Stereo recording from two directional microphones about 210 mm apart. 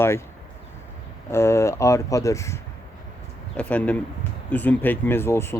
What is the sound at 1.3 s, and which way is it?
Speech, 15° left (ahead or behind).